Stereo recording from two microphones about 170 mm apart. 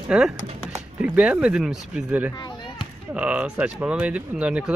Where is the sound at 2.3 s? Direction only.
25° left (ahead or behind).